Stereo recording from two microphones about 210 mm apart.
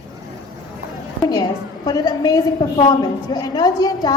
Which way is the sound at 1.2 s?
20° left (ahead or behind).